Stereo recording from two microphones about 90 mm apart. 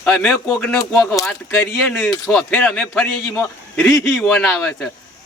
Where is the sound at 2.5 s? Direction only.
15° left (ahead or behind).